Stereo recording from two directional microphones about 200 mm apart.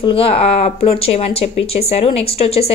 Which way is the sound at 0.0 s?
30° left (ahead or behind).